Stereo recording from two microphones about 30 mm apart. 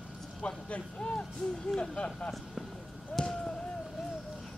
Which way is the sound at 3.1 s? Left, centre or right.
Left.